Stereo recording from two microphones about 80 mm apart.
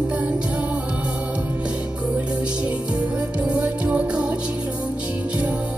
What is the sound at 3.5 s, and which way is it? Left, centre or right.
Music, centre.